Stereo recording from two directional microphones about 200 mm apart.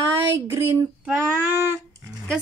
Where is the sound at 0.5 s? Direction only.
15° right (ahead or behind).